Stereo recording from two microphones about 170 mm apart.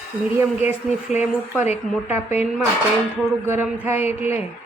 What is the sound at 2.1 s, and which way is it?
Speech, 10° right (ahead or behind).